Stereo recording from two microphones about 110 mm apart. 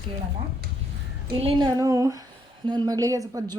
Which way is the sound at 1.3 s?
60° right (ahead or behind).